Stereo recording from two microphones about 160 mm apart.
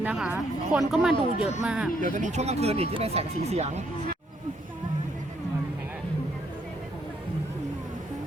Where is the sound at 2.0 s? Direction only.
50° right (ahead or behind).